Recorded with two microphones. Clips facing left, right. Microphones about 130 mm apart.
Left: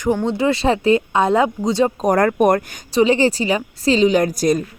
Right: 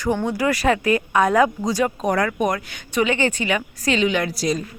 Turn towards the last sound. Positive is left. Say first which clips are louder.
# left 6 dB
turn(degrees=50)  # may be behind; listen again after turning